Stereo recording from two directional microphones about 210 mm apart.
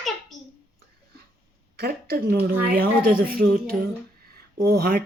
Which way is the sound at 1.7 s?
45° right (ahead or behind).